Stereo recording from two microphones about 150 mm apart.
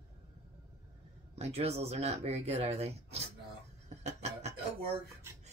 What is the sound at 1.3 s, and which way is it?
A woman's voice, 45° right (ahead or behind).